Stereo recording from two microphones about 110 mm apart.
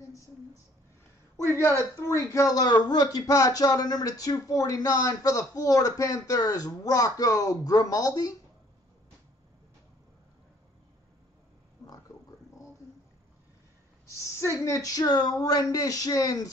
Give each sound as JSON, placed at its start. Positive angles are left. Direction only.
{"t": 1.6, "sound": "speech", "side_deg": 25}
{"t": 14.4, "sound": "speech", "side_deg": 30}